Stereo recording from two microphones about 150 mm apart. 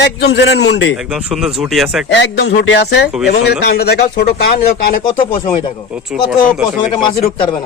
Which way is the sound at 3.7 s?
90° left.